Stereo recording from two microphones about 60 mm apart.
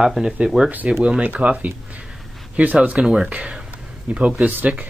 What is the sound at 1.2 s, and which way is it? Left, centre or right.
Speech, centre.